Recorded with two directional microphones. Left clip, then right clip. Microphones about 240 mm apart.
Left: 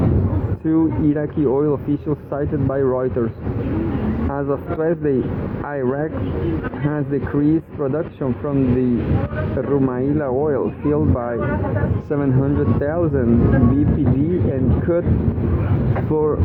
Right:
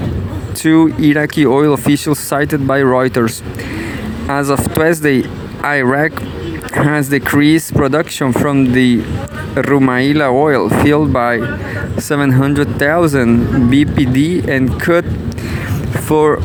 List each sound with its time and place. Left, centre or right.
0.6 s speech: right
14.5 s speech: right
16.1 s speech: right